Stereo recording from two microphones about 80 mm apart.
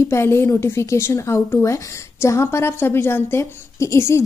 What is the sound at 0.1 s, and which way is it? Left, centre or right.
A woman's voice, left.